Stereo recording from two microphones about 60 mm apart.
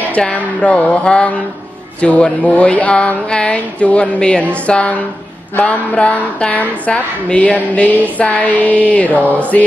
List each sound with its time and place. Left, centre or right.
0.2 s a woman's voice: left